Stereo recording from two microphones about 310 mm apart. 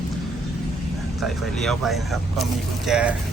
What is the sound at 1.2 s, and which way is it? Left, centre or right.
Speech, centre.